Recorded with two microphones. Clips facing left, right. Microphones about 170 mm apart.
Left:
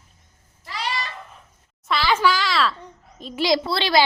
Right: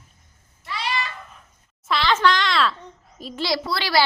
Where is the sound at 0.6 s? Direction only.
35° left (ahead or behind).